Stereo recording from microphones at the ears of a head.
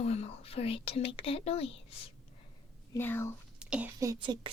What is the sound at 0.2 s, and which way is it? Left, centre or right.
Speech, left.